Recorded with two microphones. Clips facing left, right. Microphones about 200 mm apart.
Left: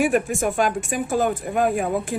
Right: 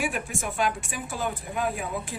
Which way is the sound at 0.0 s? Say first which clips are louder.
Left 10 dB; 45° left (ahead or behind).